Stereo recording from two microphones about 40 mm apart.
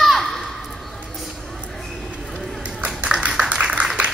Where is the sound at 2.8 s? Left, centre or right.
Right.